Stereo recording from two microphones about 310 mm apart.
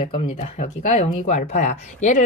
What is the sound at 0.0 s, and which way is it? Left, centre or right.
Speech, left.